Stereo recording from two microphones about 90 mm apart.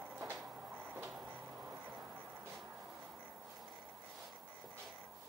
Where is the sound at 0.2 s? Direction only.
25° right (ahead or behind).